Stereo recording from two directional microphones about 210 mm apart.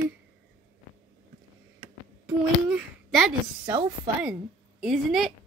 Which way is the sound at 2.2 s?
10° right (ahead or behind).